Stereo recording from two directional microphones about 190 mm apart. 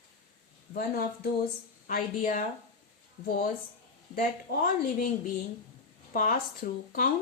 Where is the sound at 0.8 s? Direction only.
55° left (ahead or behind).